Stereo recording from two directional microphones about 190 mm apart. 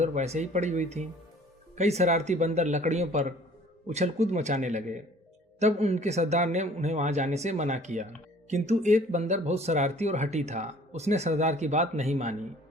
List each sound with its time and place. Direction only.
0.0 s speech: 35° right (ahead or behind)